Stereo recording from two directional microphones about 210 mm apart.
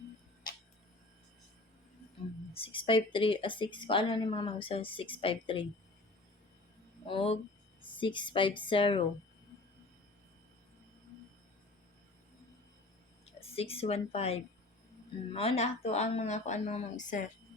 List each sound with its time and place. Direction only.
2.5 s a woman's voice: 25° left (ahead or behind)
7.1 s a woman's voice: 25° left (ahead or behind)
13.2 s a woman's voice: 30° left (ahead or behind)